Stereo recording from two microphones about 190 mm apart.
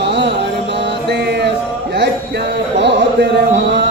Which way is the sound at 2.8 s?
65° right (ahead or behind).